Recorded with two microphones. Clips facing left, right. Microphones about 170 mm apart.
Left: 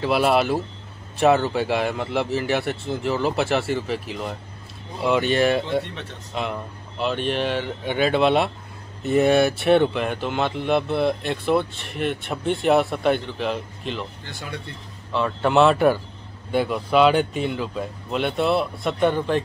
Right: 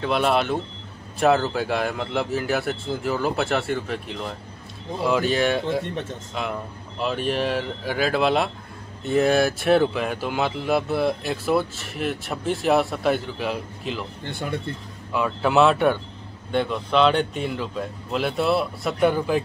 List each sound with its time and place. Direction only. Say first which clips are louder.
0.0 s speech: left 2 dB; 5° left (ahead or behind)
5.9 s speech: right 6 dB; 50° right (ahead or behind)
6.3 s speech: left 2 dB; centre (ahead or behind)
14.2 s speech: right 6 dB; 55° right (ahead or behind)
15.1 s speech: left 1 dB; 5° right (ahead or behind)